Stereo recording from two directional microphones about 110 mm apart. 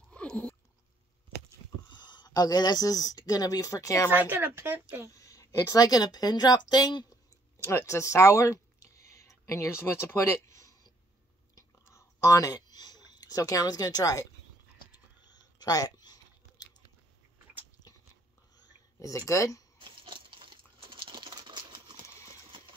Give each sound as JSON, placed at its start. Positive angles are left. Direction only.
{"t": 0.1, "sound": "chewing", "side_deg": 10}
{"t": 1.9, "sound": "speech", "side_deg": 40}
{"t": 4.1, "sound": "speech", "side_deg": -15}
{"t": 5.1, "sound": "speech", "side_deg": 30}
{"t": 7.5, "sound": "speech", "side_deg": 25}
{"t": 11.5, "sound": "clicking", "side_deg": 25}
{"t": 18.6, "sound": "a sound", "side_deg": 35}
{"t": 19.8, "sound": "crumpling", "side_deg": -50}
{"t": 22.0, "sound": "a sound", "side_deg": 25}